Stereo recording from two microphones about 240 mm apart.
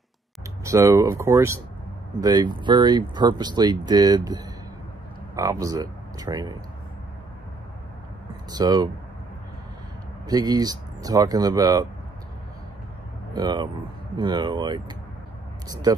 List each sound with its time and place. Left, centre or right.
0.7 s speech: centre
8.5 s speech: centre
10.2 s speech: centre
13.3 s speech: centre